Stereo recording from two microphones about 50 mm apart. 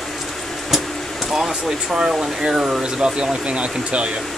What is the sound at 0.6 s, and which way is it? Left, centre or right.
Speech, centre.